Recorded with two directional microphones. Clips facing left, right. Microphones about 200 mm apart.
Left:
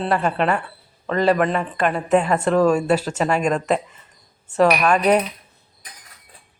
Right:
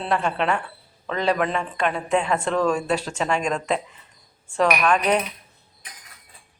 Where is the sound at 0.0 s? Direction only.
5° left (ahead or behind).